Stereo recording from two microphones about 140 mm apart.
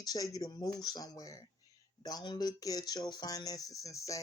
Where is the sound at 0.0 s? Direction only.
25° left (ahead or behind).